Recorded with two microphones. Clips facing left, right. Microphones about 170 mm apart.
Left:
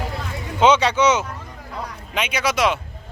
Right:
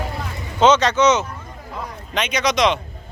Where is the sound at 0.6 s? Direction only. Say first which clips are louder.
Right 1 dB; 10° left (ahead or behind).